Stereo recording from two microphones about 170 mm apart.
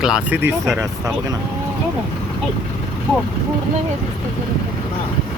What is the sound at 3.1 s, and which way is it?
Speech, 5° left (ahead or behind).